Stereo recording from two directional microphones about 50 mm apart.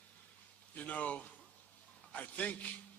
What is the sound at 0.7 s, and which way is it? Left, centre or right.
A man's voice, left.